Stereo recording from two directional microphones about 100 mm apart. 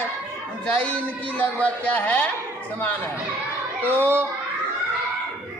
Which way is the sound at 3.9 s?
20° left (ahead or behind).